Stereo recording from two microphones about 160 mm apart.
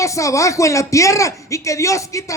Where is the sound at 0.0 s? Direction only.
20° left (ahead or behind).